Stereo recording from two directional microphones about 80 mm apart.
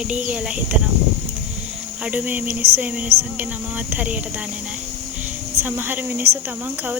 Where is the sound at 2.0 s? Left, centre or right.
Right.